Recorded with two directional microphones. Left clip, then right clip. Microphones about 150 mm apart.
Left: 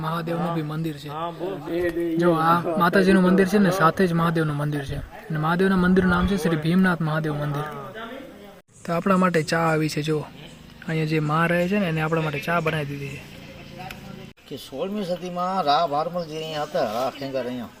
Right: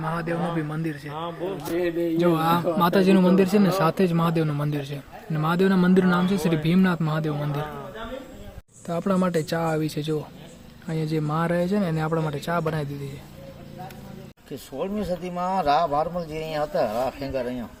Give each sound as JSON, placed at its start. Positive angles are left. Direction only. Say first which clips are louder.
{"t": 0.0, "sound": "speech", "louder": "even", "side_deg": 15}
{"t": 1.1, "sound": "speech", "louder": "left 3 dB", "side_deg": 90}
{"t": 2.1, "sound": "speech", "louder": "left 3 dB", "side_deg": -10}
{"t": 8.9, "sound": "speech", "louder": "left 4 dB", "side_deg": 0}
{"t": 15.1, "sound": "speech", "louder": "left 1 dB", "side_deg": -15}